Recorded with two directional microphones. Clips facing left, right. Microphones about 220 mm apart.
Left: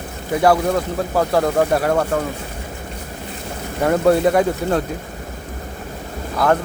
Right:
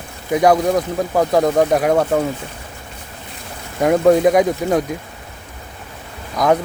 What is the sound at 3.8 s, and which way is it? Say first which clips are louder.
Speech: right 3 dB; 10° right (ahead or behind).